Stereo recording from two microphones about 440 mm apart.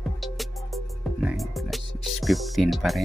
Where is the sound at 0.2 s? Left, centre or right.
Centre.